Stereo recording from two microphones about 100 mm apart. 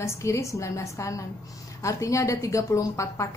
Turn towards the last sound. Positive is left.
turn(degrees=30)  # may be behind; listen again after turning